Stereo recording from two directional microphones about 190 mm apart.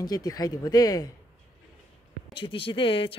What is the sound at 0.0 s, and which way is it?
Speech, 20° left (ahead or behind).